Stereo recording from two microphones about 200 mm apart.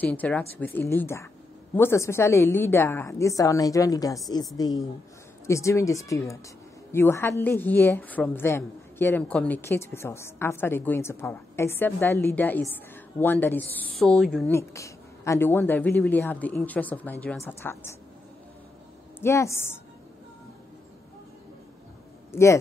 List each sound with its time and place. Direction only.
0.0 s a woman's voice: 10° left (ahead or behind)
14.5 s a woman's voice: 15° left (ahead or behind)
19.2 s a woman's voice: 15° left (ahead or behind)
22.3 s speech: 15° left (ahead or behind)